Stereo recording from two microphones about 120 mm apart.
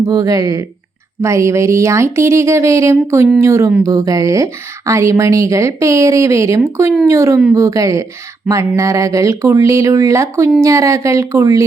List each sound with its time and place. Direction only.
0.0 s speech: 30° right (ahead or behind)